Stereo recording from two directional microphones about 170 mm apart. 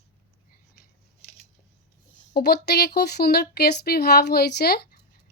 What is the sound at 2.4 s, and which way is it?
Speech, 75° left (ahead or behind).